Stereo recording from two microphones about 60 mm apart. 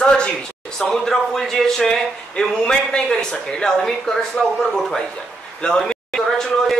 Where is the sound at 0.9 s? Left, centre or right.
Centre.